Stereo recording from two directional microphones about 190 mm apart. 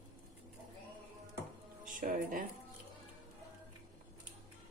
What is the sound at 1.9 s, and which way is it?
Speech, 45° right (ahead or behind).